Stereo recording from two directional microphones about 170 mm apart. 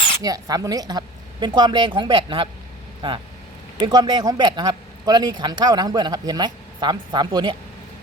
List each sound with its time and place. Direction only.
0.2 s speech: 20° right (ahead or behind)